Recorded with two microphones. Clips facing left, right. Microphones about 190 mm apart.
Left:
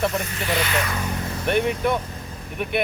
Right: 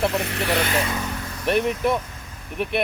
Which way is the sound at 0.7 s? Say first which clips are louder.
Right 1 dB; 25° right (ahead or behind).